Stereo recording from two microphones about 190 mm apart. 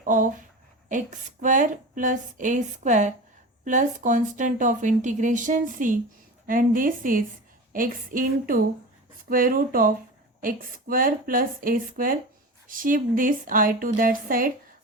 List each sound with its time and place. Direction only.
0.0 s a woman's voice: 45° right (ahead or behind)